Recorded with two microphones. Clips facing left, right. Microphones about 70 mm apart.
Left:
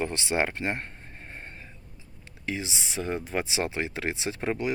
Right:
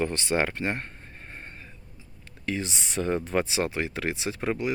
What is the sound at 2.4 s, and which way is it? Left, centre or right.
Speech, centre.